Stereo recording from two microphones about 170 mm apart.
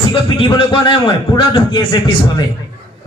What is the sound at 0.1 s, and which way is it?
A man's voice, 30° left (ahead or behind).